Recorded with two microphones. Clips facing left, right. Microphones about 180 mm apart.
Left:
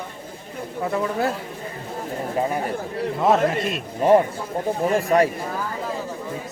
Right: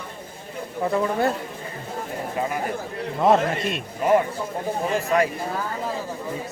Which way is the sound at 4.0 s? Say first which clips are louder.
Left 3 dB; 30° left (ahead or behind).